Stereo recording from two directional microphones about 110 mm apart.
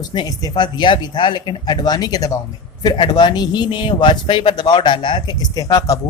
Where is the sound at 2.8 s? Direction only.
45° left (ahead or behind).